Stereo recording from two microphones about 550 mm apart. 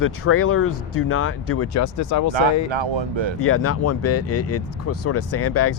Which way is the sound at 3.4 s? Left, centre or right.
Left.